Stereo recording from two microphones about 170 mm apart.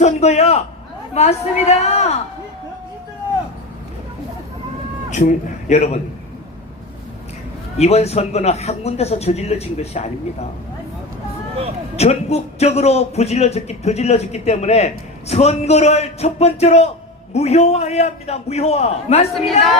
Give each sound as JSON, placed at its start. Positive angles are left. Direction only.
{"t": 0.0, "sound": "a man's voice", "side_deg": 40}
{"t": 5.1, "sound": "a man's voice", "side_deg": 45}
{"t": 7.8, "sound": "a man's voice", "side_deg": 40}
{"t": 11.9, "sound": "a man's voice", "side_deg": 40}